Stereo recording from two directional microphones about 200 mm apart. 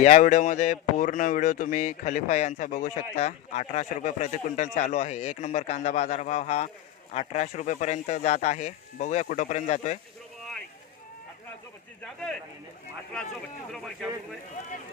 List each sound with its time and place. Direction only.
0.0 s speech: 35° left (ahead or behind)
13.7 s speech: centre (ahead or behind)